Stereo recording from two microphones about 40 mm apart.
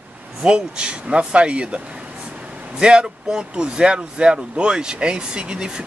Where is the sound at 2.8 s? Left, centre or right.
Right.